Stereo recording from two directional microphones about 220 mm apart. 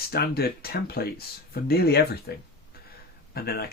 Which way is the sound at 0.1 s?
45° left (ahead or behind).